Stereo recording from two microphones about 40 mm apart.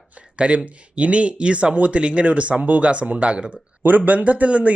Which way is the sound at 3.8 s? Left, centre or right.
Right.